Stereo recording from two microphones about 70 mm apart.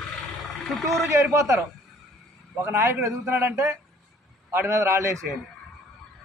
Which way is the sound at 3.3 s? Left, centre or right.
Right.